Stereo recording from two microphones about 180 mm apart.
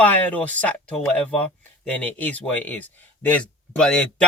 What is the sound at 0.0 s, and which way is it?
Speech, 10° left (ahead or behind).